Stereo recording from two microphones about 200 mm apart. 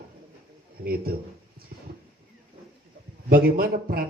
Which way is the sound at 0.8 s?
50° right (ahead or behind).